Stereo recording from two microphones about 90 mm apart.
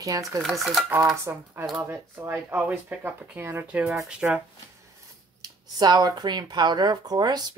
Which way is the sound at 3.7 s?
5° right (ahead or behind).